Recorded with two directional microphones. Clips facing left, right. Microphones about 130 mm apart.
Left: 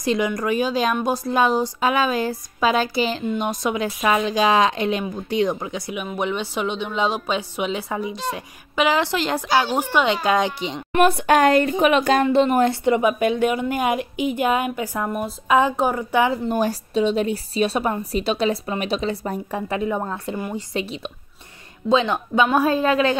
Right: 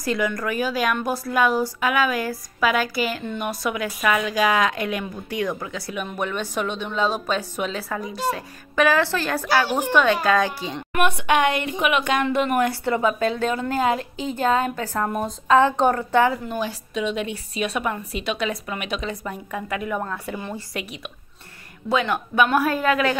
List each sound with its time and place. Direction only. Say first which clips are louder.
0.0 s a woman's voice: left 3 dB; 20° left (ahead or behind)
10.9 s a woman's voice: left 4 dB; 35° left (ahead or behind); by 16.3 s 15° left (ahead or behind)
16.4 s a woman's voice: left 6 dB; 45° left (ahead or behind)
16.9 s a woman's voice: left 5 dB; 35° left (ahead or behind)